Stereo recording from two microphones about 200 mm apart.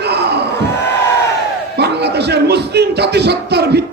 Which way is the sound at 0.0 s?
55° right (ahead or behind).